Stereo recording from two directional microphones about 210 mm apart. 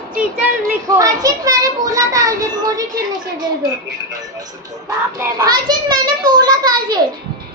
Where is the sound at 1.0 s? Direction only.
15° right (ahead or behind).